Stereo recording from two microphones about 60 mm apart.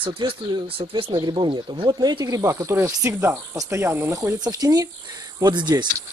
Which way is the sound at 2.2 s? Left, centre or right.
Right.